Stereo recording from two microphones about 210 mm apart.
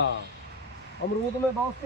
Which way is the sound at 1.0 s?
60° left (ahead or behind).